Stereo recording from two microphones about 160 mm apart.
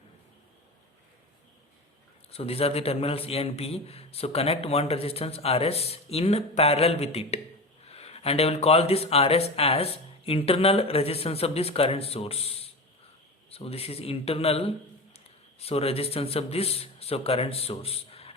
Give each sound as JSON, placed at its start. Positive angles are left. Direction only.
{"t": 2.3, "sound": "a man's voice", "side_deg": 40}